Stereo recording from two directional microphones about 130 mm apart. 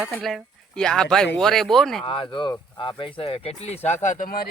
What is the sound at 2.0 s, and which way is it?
Speech, 40° left (ahead or behind).